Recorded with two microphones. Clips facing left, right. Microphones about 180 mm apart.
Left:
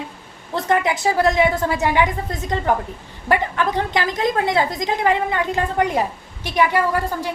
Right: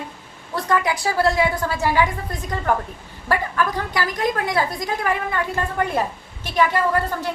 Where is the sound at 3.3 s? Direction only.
20° left (ahead or behind).